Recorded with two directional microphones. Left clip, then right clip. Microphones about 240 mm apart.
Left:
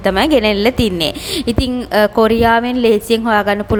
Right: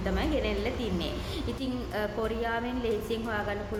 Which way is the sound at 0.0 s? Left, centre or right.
Left.